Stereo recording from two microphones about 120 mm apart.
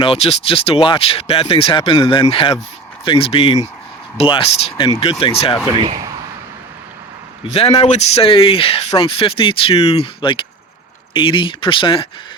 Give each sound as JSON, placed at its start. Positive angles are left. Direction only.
{"t": 0.0, "sound": "speech", "side_deg": 55}
{"t": 7.5, "sound": "speech", "side_deg": 55}
{"t": 10.2, "sound": "speech", "side_deg": 45}